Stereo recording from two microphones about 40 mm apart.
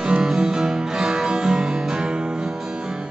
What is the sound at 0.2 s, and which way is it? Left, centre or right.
Music, centre.